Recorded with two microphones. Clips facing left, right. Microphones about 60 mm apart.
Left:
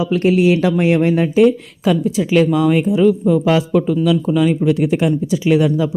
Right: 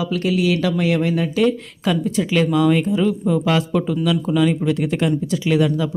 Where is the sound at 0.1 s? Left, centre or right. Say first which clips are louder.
Left 7 dB; left.